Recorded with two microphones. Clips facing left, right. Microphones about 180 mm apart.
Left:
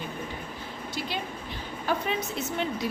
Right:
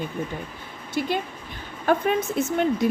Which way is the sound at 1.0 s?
55° right (ahead or behind).